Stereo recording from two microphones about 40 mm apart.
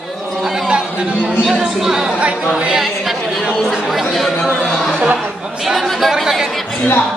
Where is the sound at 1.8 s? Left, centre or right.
Centre.